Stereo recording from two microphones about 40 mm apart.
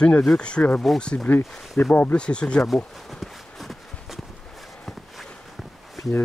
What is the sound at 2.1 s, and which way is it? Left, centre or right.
Speech, left.